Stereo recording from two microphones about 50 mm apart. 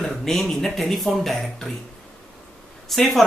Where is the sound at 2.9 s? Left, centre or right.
Centre.